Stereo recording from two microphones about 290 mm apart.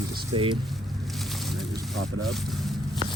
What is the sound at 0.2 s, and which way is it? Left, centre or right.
Speech, centre.